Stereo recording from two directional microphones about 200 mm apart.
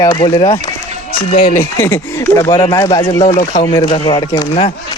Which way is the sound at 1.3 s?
40° left (ahead or behind).